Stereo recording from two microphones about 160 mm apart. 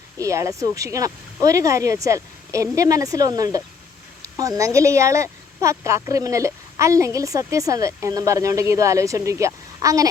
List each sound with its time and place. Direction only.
0.2 s a woman's voice: 20° right (ahead or behind)